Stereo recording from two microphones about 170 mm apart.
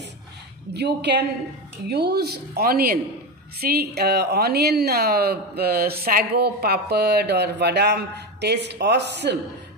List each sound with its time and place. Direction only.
0.7 s a woman's voice: 80° right